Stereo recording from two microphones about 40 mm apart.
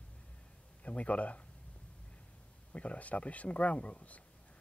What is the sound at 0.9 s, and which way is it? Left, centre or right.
Speech, left.